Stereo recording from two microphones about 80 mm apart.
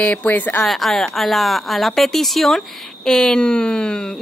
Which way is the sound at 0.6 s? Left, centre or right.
Centre.